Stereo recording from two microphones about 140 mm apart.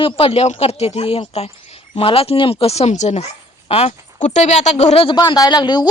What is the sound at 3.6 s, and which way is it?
Speech, 45° left (ahead or behind).